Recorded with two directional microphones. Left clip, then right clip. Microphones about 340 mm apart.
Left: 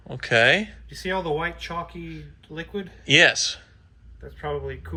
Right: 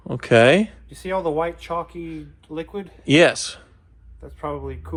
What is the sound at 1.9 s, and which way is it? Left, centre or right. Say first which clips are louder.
Speech: right 5 dB; centre.